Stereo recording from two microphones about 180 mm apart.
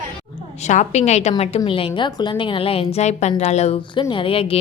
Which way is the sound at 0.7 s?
40° left (ahead or behind).